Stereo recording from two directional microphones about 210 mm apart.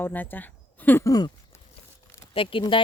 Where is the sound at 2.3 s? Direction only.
25° left (ahead or behind).